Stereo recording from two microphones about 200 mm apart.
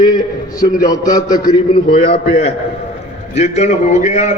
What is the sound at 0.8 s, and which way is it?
Speech, 15° left (ahead or behind).